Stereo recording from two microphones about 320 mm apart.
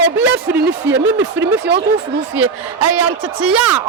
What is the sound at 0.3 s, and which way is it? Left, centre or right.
Speech, right.